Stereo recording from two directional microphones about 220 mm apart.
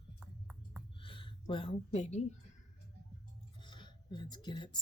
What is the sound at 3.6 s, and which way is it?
Music, 20° left (ahead or behind).